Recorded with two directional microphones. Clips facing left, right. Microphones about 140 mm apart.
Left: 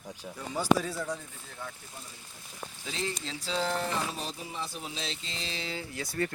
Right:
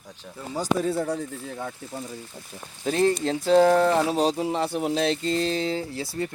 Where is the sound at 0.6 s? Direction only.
55° right (ahead or behind); by 2.0 s 80° right.